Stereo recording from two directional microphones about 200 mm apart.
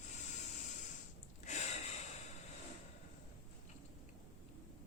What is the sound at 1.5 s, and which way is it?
Gasp, 35° left (ahead or behind).